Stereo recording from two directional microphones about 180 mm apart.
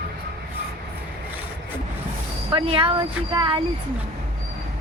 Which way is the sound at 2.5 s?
30° right (ahead or behind).